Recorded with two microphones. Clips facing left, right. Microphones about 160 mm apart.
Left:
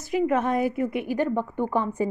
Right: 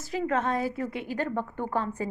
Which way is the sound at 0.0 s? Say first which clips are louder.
Left 5 dB; 15° left (ahead or behind).